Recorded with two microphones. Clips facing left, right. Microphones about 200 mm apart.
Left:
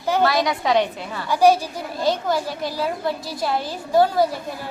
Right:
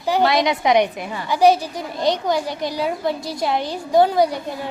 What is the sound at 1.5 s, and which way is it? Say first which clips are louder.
A child's voice: right 1 dB; 10° left (ahead or behind).